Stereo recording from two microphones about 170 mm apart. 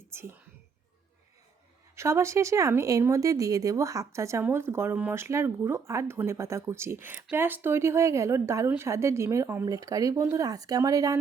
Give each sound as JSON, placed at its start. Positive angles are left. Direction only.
{"t": 0.1, "sound": "speech", "side_deg": -15}
{"t": 2.0, "sound": "speech", "side_deg": -15}